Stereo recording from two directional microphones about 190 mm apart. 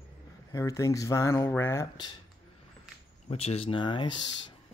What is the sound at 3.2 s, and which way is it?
Speech, 30° left (ahead or behind).